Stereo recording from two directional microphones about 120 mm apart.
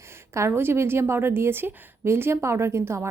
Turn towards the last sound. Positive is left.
turn(degrees=-20)  # may be behind; listen again after turning